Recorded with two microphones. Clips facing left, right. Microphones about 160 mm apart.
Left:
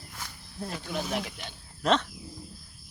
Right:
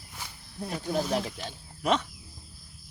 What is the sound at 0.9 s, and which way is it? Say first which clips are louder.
Speech: right 5 dB; 35° right (ahead or behind).